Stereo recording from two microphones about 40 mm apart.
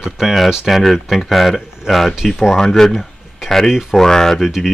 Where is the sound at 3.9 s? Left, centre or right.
Centre.